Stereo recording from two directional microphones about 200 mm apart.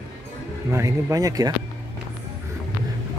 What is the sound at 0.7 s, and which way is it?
Speech, 15° right (ahead or behind).